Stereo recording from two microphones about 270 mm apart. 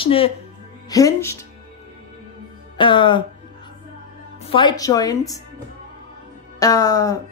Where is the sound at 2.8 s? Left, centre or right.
Centre.